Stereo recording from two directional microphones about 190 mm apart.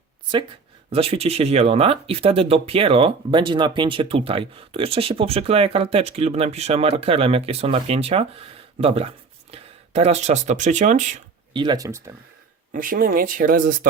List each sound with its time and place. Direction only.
0.9 s speech: 30° right (ahead or behind)
11.5 s speech: 25° right (ahead or behind)
12.7 s speech: 45° right (ahead or behind)